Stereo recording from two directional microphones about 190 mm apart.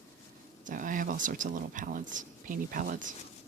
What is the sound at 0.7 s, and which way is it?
Speech, 45° right (ahead or behind).